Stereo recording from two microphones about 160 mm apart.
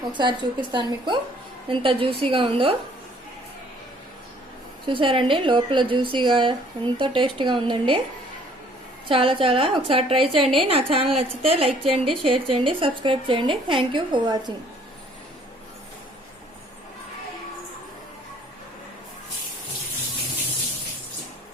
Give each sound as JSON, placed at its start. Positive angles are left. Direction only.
{"t": 0.0, "sound": "a woman's voice", "side_deg": -30}
{"t": 4.9, "sound": "a woman's voice", "side_deg": -30}
{"t": 9.0, "sound": "a woman's voice", "side_deg": -35}